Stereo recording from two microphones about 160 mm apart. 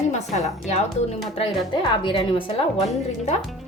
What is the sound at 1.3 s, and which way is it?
A woman's voice, 30° left (ahead or behind).